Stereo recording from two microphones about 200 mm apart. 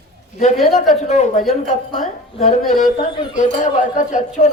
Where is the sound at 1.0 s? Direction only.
35° left (ahead or behind).